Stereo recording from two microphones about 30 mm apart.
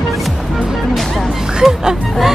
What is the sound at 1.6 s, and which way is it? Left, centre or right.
Speech, centre.